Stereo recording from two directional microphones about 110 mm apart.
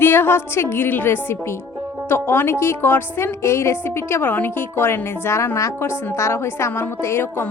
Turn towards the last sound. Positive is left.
turn(degrees=20)  # may be behind; listen again after turning